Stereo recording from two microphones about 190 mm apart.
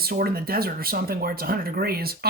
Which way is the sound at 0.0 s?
50° right (ahead or behind).